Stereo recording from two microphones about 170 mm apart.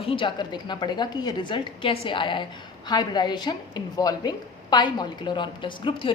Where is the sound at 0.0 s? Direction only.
30° left (ahead or behind).